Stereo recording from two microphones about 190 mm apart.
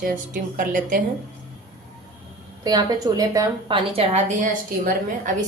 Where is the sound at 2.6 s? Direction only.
20° right (ahead or behind); by 5.3 s 45° right (ahead or behind).